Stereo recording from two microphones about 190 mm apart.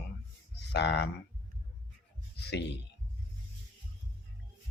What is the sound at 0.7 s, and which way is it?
Speech, 60° left (ahead or behind).